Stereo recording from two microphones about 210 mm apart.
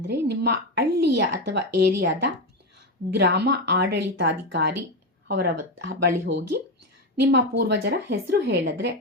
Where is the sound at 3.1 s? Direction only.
55° right (ahead or behind).